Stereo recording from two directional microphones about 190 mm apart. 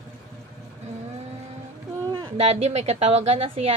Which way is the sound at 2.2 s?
30° right (ahead or behind).